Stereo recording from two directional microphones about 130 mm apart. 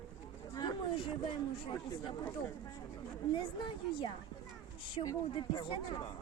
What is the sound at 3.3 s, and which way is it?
Speech, 40° left (ahead or behind).